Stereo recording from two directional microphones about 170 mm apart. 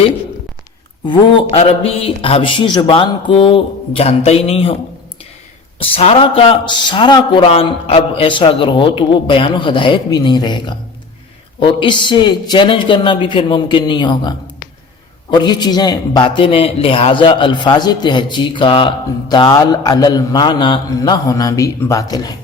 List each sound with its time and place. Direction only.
1.0 s a man's voice: 30° left (ahead or behind)
5.8 s a man's voice: 35° left (ahead or behind)